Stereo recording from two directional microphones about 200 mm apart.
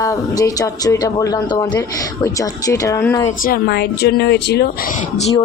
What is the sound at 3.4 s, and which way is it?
Speech, 50° left (ahead or behind).